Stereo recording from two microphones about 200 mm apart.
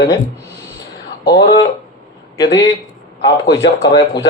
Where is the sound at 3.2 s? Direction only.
60° left (ahead or behind).